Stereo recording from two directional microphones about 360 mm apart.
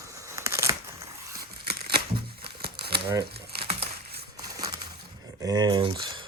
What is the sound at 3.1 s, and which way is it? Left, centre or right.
Crumpling, centre.